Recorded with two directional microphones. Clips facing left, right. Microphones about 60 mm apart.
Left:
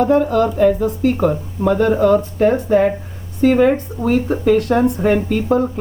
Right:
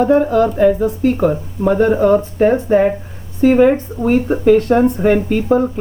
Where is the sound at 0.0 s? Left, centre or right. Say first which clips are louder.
Right 2 dB; centre.